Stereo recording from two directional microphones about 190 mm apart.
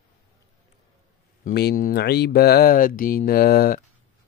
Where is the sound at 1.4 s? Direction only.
55° left (ahead or behind).